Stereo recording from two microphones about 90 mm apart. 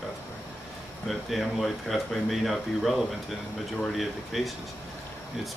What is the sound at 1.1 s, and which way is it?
Speech, centre (ahead or behind).